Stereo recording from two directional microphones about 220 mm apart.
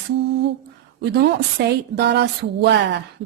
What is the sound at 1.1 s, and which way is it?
A woman's voice, 50° right (ahead or behind).